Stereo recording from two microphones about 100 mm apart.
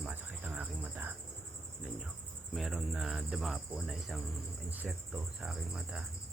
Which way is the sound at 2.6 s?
5° right (ahead or behind).